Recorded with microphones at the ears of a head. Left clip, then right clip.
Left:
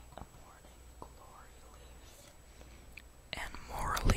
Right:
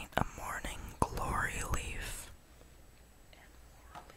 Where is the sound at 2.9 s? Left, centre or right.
Left.